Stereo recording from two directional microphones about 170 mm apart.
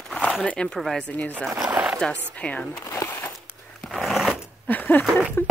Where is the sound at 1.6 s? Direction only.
10° right (ahead or behind).